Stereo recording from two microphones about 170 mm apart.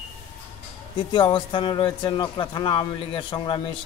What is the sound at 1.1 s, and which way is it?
A man's voice, 30° left (ahead or behind).